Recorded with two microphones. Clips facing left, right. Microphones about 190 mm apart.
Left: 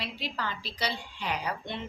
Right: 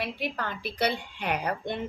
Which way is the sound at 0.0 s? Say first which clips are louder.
Right 4 dB; 55° right (ahead or behind).